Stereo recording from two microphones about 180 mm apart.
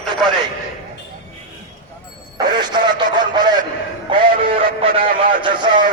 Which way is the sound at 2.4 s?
25° right (ahead or behind).